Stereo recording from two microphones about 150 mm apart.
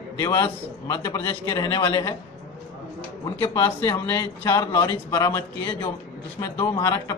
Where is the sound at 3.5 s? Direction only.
20° left (ahead or behind).